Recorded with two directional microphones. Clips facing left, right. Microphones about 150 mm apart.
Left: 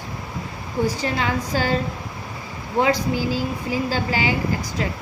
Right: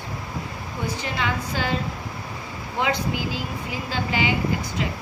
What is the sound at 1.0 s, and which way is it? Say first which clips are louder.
Speech: left 4 dB; 35° left (ahead or behind).